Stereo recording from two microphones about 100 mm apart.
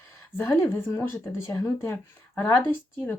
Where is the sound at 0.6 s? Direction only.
20° left (ahead or behind).